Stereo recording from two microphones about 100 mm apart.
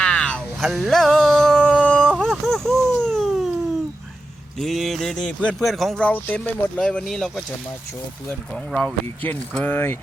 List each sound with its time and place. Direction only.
0.0 s a sound: 10° left (ahead or behind)
4.6 s speech: centre (ahead or behind)
6.0 s speech: 15° left (ahead or behind)
6.7 s speech: 5° left (ahead or behind)
9.2 s speech: 20° left (ahead or behind)